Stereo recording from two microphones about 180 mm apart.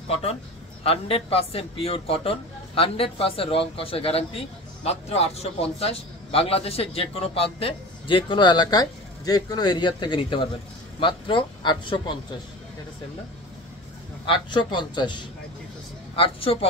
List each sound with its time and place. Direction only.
0.1 s a man's voice: 35° left (ahead or behind)
14.2 s a man's voice: 25° left (ahead or behind)